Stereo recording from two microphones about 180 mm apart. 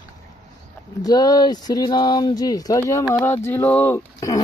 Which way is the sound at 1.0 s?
20° left (ahead or behind).